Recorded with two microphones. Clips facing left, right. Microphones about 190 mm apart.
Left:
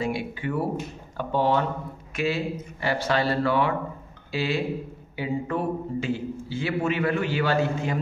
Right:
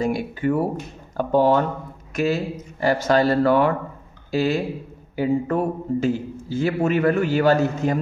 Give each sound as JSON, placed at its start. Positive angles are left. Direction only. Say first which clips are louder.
{"t": 0.0, "sound": "a man's voice", "louder": "right 6 dB", "side_deg": -45}